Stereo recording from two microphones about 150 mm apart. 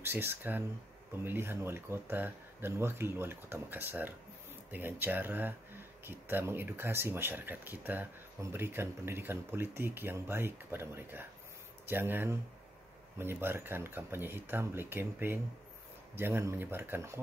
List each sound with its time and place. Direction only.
0.0 s speech: 15° right (ahead or behind)